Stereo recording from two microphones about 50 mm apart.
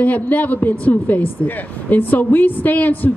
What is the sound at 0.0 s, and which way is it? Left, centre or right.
A woman's voice, left.